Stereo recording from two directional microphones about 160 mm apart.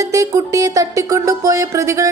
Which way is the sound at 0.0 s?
20° right (ahead or behind).